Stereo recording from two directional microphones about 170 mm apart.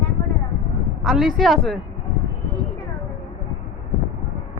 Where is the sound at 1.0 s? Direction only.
Centre (ahead or behind).